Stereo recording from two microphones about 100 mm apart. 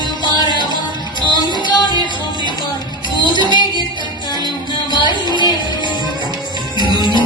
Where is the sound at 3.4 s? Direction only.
50° left (ahead or behind).